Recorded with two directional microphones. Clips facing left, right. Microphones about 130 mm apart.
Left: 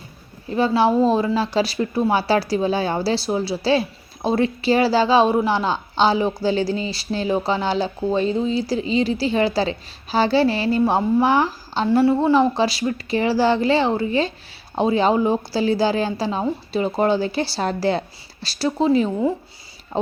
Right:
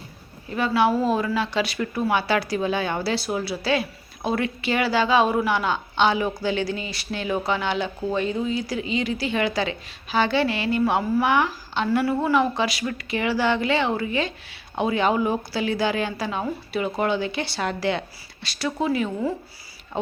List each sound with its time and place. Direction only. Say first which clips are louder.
0.4 s a woman's voice: left 3 dB; 30° left (ahead or behind)